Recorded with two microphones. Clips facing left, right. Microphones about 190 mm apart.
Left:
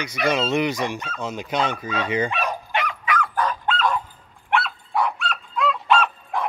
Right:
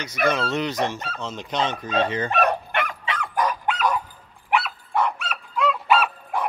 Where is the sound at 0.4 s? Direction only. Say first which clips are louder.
Left 2 dB; 10° left (ahead or behind).